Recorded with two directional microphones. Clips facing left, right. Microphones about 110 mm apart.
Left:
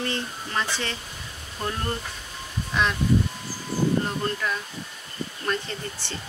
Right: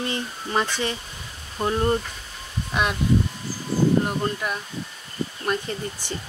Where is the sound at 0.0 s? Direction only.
15° right (ahead or behind).